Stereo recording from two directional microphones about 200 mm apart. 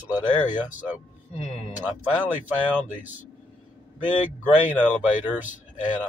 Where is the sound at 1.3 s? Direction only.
35° left (ahead or behind).